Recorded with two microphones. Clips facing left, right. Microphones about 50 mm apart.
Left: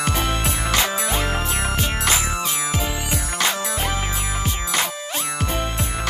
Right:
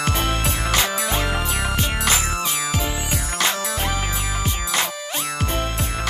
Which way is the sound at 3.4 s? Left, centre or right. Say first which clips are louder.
Even; centre.